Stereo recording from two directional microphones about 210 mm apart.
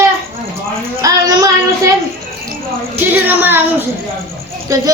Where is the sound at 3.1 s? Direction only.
10° right (ahead or behind).